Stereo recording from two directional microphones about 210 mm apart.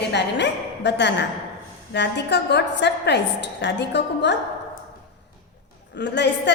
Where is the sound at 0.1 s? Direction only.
55° left (ahead or behind).